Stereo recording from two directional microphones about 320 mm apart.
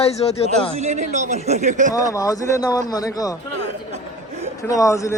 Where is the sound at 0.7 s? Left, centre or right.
Right.